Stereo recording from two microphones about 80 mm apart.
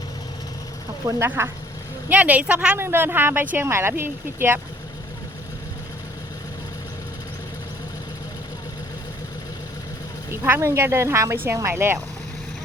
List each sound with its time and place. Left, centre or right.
1.0 s speech: right
2.0 s speech: centre
2.7 s speech: right
10.2 s speech: right